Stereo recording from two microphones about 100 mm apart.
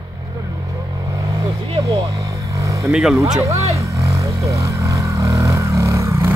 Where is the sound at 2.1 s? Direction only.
35° right (ahead or behind).